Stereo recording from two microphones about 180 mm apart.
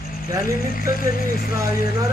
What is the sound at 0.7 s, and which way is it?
Speech, 50° left (ahead or behind).